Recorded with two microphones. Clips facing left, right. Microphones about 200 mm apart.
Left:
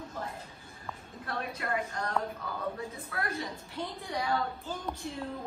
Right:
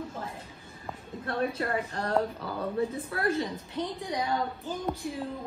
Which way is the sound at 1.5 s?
30° right (ahead or behind).